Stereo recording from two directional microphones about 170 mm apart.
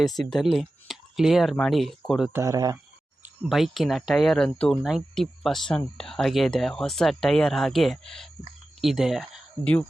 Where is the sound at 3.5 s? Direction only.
Centre (ahead or behind).